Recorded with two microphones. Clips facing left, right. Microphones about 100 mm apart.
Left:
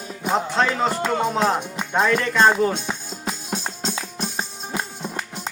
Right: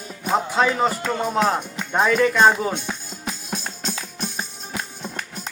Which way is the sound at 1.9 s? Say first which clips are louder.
Right 2 dB; 10° right (ahead or behind).